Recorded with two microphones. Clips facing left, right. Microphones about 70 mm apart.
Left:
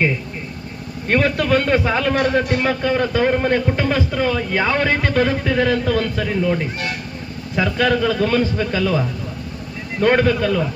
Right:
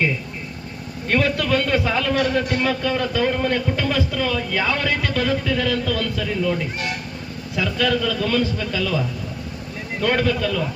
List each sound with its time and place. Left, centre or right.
1.0 s a man's voice: left